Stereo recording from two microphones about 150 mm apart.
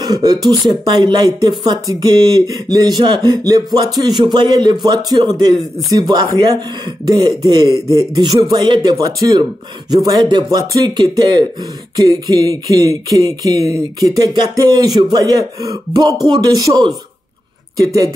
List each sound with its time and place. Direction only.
0.0 s speech: 25° right (ahead or behind)